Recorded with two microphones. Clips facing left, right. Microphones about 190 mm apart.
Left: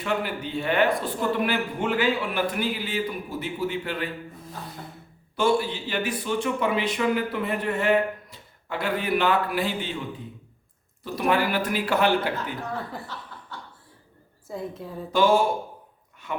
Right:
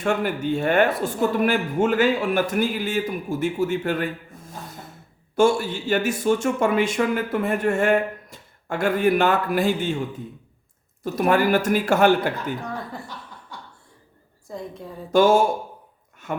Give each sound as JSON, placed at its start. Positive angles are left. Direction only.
{"t": 0.0, "sound": "speech", "side_deg": -45}
{"t": 11.0, "sound": "speech", "side_deg": -45}
{"t": 13.5, "sound": "chuckle", "side_deg": -15}
{"t": 14.4, "sound": "a woman's voice", "side_deg": 5}
{"t": 15.1, "sound": "speech", "side_deg": -45}